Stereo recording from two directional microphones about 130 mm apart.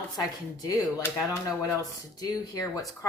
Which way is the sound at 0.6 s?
20° left (ahead or behind).